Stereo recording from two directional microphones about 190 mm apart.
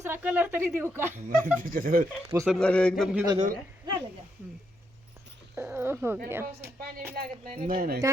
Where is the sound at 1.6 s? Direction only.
50° right (ahead or behind).